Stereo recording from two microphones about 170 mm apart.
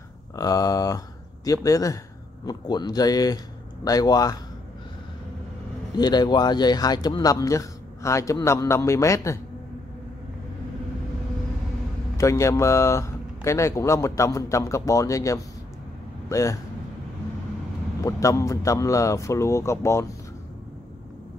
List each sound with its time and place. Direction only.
0.4 s speech: 20° left (ahead or behind)
5.9 s speech: 25° left (ahead or behind)
12.2 s speech: 15° left (ahead or behind)
18.0 s speech: 20° left (ahead or behind)